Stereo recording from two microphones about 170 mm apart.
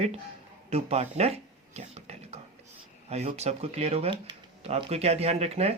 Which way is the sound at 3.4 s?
40° right (ahead or behind).